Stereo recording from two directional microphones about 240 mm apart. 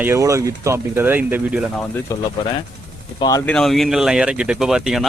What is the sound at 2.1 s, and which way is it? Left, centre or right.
Speech, centre.